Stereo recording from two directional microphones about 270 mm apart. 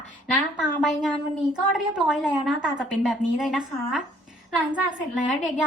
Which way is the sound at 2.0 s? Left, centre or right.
Centre.